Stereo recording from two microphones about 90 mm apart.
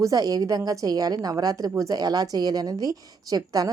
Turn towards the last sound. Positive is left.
turn(degrees=-45)  # may be behind; listen again after turning